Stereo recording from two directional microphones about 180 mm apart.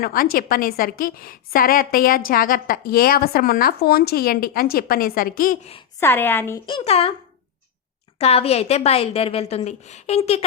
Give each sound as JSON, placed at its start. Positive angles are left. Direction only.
{"t": 0.0, "sound": "a woman's voice", "side_deg": 55}
{"t": 6.0, "sound": "a woman's voice", "side_deg": 10}
{"t": 6.7, "sound": "a woman's voice", "side_deg": 30}
{"t": 8.2, "sound": "a woman's voice", "side_deg": 35}